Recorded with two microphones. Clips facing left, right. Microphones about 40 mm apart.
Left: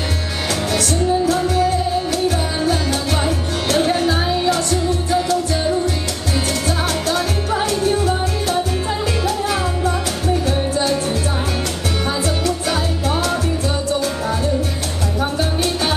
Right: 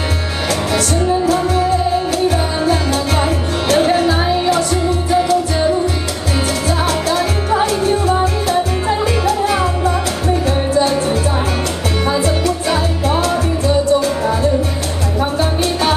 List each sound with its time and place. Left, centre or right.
0.7 s music: centre
7.1 s music: centre